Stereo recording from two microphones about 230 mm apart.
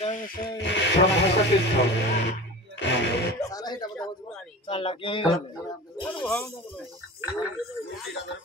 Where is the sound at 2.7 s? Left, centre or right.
Left.